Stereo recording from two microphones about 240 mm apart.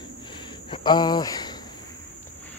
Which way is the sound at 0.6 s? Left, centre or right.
Centre.